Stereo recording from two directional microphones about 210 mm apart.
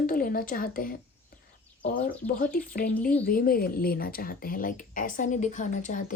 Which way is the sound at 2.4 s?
45° left (ahead or behind).